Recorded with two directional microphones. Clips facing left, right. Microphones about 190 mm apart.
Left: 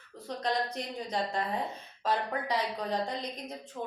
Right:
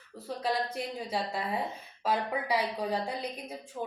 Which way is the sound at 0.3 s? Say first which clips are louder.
Even; 5° right (ahead or behind).